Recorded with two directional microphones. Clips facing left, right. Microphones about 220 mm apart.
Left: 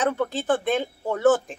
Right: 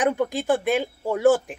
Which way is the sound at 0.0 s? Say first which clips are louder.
Right 2 dB; 10° right (ahead or behind).